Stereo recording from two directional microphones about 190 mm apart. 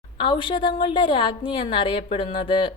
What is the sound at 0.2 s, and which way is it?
A woman's voice, 25° left (ahead or behind).